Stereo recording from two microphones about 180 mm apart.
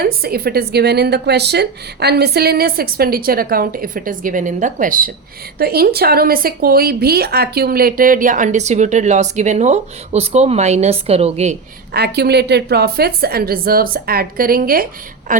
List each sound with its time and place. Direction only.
0.0 s a woman's voice: 55° right (ahead or behind); by 11.5 s 35° right (ahead or behind)
11.9 s a woman's voice: 65° right (ahead or behind); by 15.4 s 45° right (ahead or behind)